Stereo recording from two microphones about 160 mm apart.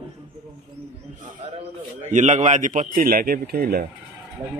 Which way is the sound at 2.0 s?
50° right (ahead or behind).